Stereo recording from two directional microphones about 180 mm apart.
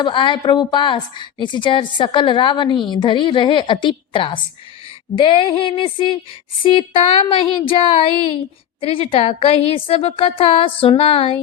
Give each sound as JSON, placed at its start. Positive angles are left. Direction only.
{"t": 0.0, "sound": "a woman's voice", "side_deg": 25}